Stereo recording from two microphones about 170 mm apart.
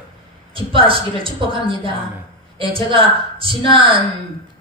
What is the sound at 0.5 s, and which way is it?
A man's voice, 30° right (ahead or behind).